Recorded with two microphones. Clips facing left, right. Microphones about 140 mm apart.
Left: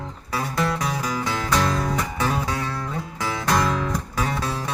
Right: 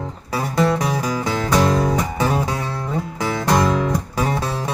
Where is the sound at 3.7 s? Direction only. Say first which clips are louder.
Right 5 dB; 10° right (ahead or behind).